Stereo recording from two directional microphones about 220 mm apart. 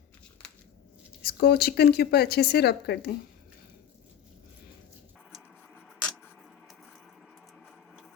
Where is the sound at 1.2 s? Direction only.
45° left (ahead or behind).